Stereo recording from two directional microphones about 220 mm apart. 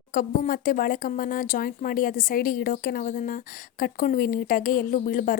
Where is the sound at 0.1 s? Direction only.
40° left (ahead or behind).